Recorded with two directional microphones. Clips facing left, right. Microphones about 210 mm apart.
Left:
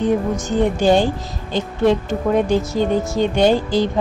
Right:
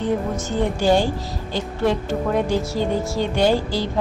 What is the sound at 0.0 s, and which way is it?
A woman's voice, 15° left (ahead or behind).